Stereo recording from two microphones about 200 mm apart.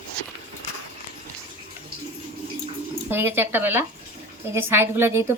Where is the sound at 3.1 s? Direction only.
10° right (ahead or behind).